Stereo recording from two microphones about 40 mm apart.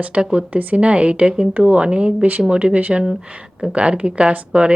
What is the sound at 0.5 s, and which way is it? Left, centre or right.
Speech, right.